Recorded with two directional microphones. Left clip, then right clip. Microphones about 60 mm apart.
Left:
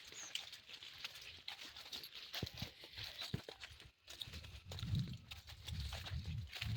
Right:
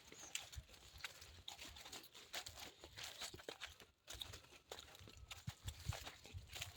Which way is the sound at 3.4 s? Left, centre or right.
Right.